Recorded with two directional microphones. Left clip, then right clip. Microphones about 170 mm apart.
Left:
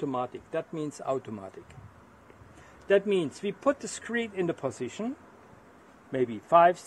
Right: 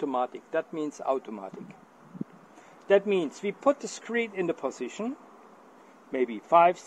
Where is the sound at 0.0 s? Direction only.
25° left (ahead or behind).